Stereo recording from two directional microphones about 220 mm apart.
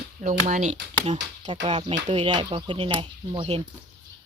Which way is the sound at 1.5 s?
25° right (ahead or behind).